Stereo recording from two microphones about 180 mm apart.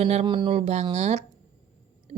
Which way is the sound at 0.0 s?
35° right (ahead or behind).